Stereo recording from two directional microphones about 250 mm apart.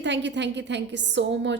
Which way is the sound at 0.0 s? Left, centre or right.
Right.